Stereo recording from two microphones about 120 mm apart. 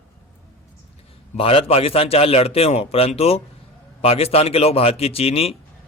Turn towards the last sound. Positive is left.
turn(degrees=55)  # may be behind; listen again after turning